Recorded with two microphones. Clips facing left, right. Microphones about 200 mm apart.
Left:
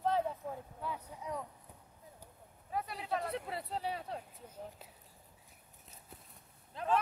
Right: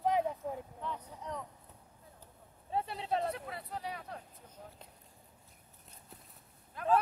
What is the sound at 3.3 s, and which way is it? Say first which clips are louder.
Speech: left 3 dB; 30° left (ahead or behind).